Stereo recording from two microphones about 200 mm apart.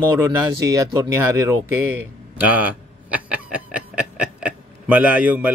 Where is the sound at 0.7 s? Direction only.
15° right (ahead or behind).